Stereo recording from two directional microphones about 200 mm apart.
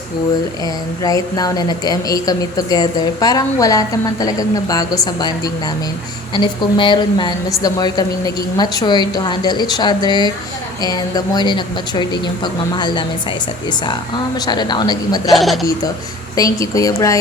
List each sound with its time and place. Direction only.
1.0 s a woman's voice: 15° left (ahead or behind)
6.3 s a woman's voice: 25° left (ahead or behind)
14.4 s a woman's voice: 20° left (ahead or behind)
15.3 s speech: centre (ahead or behind)
16.3 s a woman's voice: 15° left (ahead or behind)